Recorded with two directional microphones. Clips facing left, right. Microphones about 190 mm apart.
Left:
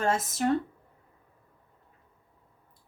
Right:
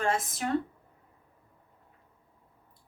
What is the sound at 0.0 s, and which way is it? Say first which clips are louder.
Speech: left 2 dB; 40° left (ahead or behind).